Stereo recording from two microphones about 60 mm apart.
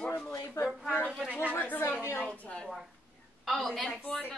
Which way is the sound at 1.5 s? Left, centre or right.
Left.